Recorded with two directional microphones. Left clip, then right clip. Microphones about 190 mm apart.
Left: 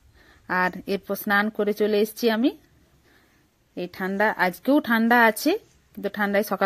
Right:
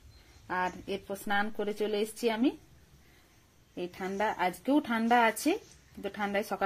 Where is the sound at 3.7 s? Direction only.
40° left (ahead or behind).